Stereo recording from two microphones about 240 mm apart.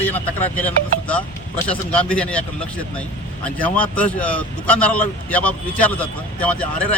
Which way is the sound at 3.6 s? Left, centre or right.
Centre.